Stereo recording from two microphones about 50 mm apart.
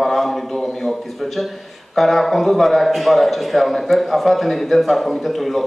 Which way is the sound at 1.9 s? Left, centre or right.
Centre.